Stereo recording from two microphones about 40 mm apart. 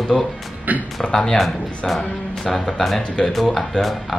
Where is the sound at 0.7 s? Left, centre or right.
Right.